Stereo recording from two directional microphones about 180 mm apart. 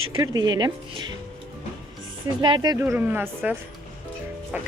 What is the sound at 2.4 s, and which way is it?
Speech, 25° right (ahead or behind).